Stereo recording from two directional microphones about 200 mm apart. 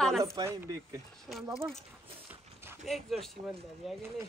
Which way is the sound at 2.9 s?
Centre (ahead or behind).